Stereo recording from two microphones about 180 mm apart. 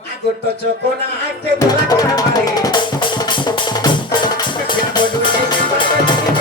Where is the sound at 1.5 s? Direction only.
20° left (ahead or behind).